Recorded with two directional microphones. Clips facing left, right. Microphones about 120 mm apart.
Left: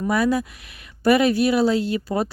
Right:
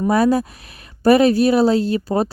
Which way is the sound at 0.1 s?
35° right (ahead or behind).